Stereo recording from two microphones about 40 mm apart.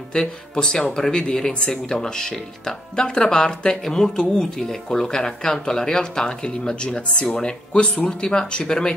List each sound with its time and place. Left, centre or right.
0.1 s speech: centre